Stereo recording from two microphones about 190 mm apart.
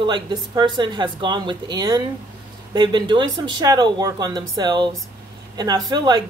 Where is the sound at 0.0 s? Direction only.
25° right (ahead or behind).